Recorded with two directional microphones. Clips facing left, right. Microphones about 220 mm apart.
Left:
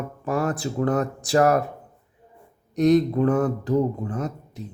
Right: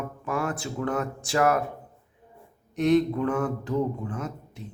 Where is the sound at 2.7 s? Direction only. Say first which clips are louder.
Left 3 dB; 40° left (ahead or behind).